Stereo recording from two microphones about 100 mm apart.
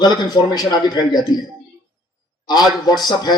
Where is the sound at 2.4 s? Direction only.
45° left (ahead or behind).